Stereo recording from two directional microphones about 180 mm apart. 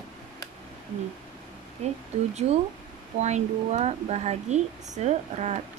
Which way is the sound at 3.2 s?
40° right (ahead or behind).